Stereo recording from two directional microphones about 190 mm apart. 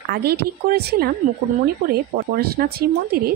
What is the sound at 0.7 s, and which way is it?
A woman's voice, 55° right (ahead or behind).